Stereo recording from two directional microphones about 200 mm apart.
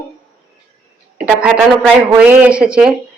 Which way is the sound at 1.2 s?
Centre (ahead or behind).